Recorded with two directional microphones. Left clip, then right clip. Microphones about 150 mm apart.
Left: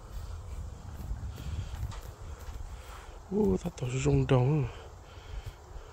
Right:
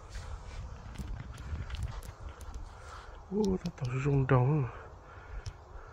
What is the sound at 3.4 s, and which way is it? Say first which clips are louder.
Speech: left 4 dB; 30° left (ahead or behind).